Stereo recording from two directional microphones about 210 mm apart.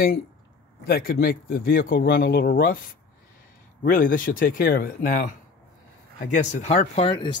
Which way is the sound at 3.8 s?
40° left (ahead or behind).